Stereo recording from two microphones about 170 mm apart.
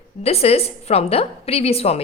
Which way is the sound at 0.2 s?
35° left (ahead or behind).